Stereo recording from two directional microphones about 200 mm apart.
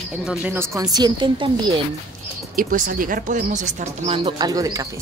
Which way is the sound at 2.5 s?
45° right (ahead or behind).